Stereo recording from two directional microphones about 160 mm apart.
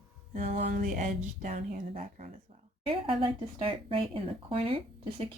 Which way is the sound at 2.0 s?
65° right (ahead or behind).